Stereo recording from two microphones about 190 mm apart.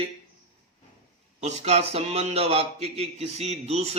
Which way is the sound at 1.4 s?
35° right (ahead or behind).